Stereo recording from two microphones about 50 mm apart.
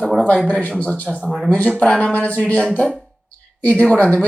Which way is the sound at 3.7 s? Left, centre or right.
Left.